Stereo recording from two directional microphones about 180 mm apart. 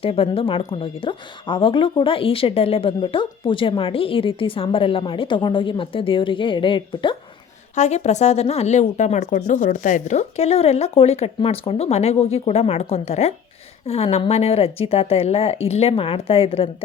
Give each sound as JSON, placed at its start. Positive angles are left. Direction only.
{"t": 0.0, "sound": "speech", "side_deg": 30}
{"t": 7.8, "sound": "speech", "side_deg": 40}